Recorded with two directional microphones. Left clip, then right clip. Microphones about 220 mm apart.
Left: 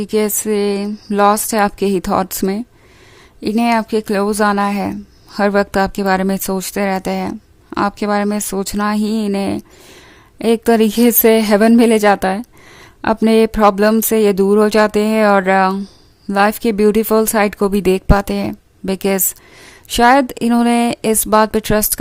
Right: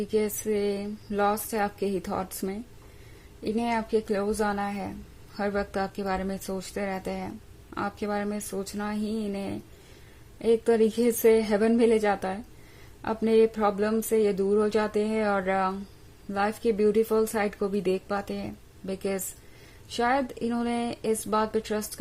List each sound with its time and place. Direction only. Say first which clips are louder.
0.0 s speech: left 10 dB; 40° left (ahead or behind)